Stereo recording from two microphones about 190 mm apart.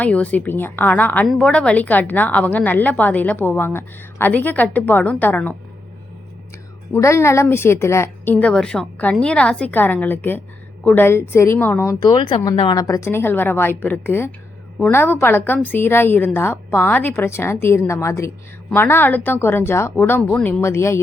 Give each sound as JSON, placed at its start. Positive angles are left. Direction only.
{"t": 0.0, "sound": "a woman's voice", "side_deg": 5}
{"t": 6.9, "sound": "a woman's voice", "side_deg": 15}